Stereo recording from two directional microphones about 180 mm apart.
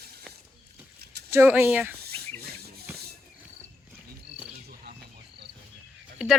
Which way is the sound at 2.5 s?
60° right (ahead or behind).